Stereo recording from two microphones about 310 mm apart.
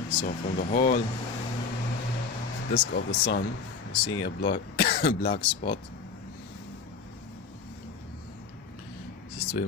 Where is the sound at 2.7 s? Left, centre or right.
Left.